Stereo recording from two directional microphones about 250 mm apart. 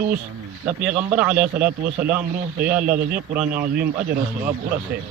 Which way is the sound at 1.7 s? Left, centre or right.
Right.